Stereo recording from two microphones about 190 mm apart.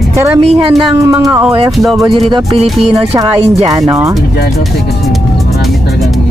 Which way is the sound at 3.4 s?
35° right (ahead or behind).